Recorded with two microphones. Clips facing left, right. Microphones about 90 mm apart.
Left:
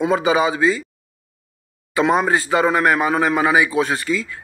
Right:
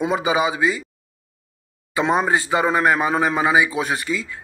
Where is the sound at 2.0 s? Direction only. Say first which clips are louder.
Left 2 dB; 20° right (ahead or behind).